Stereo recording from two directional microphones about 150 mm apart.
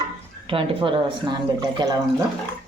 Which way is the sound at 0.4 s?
40° right (ahead or behind).